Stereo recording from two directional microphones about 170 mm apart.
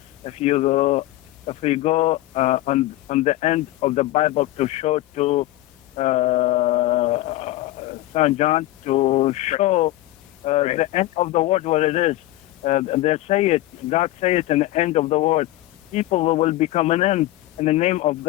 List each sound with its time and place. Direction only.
0.3 s speech: 40° left (ahead or behind)
6.0 s a sound: 40° left (ahead or behind)
10.4 s speech: 40° left (ahead or behind)